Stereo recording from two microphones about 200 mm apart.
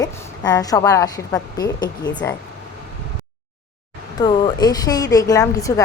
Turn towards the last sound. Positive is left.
turn(degrees=15)  # may be behind; listen again after turning